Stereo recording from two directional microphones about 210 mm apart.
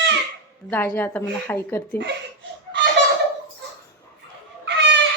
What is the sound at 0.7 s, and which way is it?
Speech, 10° left (ahead or behind).